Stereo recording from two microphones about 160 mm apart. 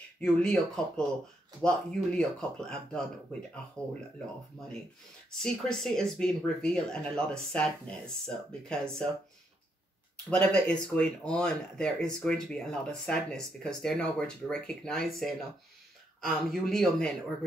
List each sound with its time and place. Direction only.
0.2 s speech: 5° left (ahead or behind)
3.8 s speech: 20° right (ahead or behind)
5.3 s speech: 5° left (ahead or behind)
10.3 s speech: 5° left (ahead or behind)